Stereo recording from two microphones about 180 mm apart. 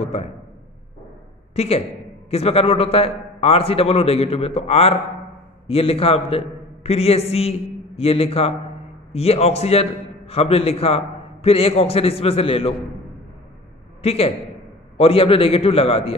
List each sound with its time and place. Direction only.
0.0 s a sound: 35° left (ahead or behind)
1.5 s a man's voice: 35° left (ahead or behind)
14.0 s a man's voice: 35° left (ahead or behind)